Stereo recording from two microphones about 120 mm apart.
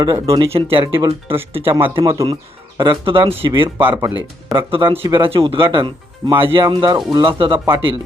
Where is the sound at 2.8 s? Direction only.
45° right (ahead or behind).